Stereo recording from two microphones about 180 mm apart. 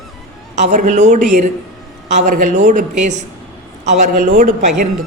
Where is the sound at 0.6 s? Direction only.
45° right (ahead or behind).